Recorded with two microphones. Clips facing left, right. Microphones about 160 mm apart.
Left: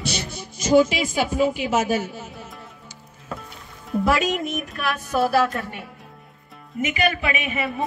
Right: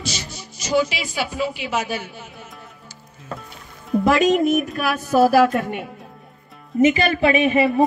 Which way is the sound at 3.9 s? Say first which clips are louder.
Right 5 dB; 5° left (ahead or behind).